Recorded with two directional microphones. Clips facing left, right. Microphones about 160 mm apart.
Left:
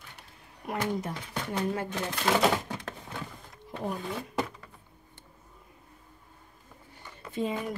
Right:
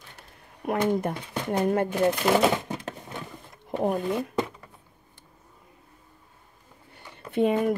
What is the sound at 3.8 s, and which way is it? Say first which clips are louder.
Speech: right 9 dB; 60° right (ahead or behind).